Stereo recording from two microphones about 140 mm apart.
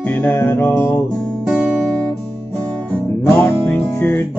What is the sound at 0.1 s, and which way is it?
Music, 15° left (ahead or behind).